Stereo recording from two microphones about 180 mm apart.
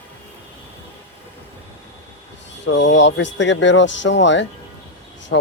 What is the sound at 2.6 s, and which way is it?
Speech, 90° left.